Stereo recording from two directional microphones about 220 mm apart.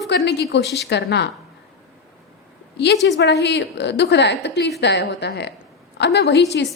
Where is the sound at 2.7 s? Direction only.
50° left (ahead or behind).